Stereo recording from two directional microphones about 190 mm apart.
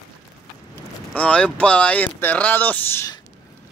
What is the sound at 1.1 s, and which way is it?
Speech, 5° left (ahead or behind).